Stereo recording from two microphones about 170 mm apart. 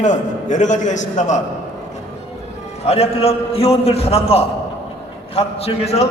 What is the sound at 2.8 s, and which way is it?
A man's voice, 35° left (ahead or behind).